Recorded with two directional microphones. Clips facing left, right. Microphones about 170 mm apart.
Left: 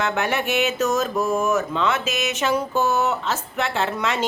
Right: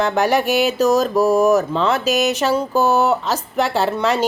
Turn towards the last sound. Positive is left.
turn(degrees=-35)  # may be behind; listen again after turning